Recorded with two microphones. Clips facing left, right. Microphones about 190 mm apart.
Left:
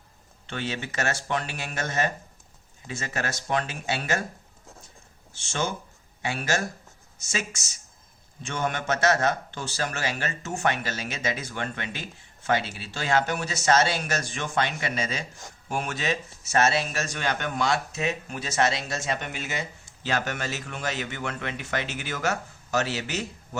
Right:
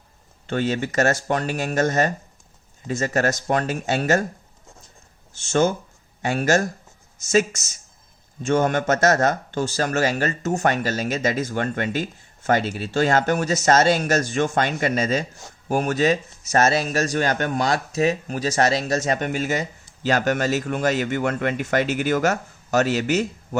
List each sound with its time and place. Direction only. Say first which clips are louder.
0.4 s speech: right 9 dB; 45° right (ahead or behind)
5.4 s a man's voice: right 10 dB; 45° right (ahead or behind)